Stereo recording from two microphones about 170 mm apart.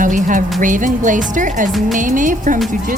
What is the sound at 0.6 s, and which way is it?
A woman's voice, 50° right (ahead or behind).